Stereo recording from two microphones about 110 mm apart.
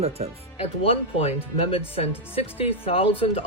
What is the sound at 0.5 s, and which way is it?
Speech, 65° left (ahead or behind).